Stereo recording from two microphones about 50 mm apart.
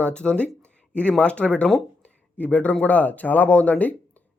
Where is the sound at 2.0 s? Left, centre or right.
Left.